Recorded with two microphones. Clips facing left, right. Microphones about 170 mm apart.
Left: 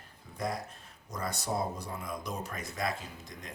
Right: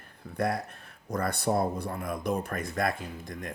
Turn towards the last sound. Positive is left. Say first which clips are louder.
# right 8 dB
turn(degrees=-55)  # may be behind; listen again after turning